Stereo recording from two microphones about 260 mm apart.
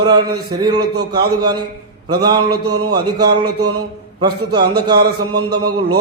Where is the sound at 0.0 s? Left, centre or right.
Centre.